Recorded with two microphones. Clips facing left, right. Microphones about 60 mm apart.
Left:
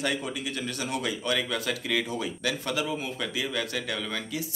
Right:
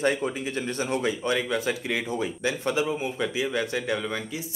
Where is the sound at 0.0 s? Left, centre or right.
Right.